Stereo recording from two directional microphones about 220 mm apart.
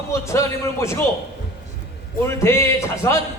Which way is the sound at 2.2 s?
10° left (ahead or behind).